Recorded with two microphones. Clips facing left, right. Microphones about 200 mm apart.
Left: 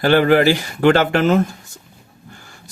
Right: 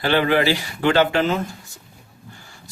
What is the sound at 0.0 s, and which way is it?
Speech, 45° left (ahead or behind).